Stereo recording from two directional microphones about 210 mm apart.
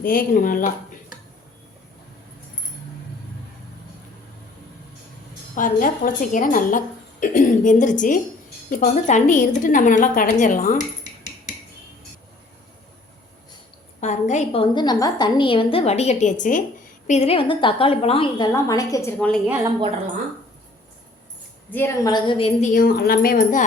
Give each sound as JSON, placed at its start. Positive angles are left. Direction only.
{"t": 0.0, "sound": "a woman's voice", "side_deg": 45}
{"t": 5.5, "sound": "a woman's voice", "side_deg": 40}
{"t": 14.0, "sound": "a woman's voice", "side_deg": 35}
{"t": 21.7, "sound": "a woman's voice", "side_deg": 10}
{"t": 22.7, "sound": "a woman's voice", "side_deg": 45}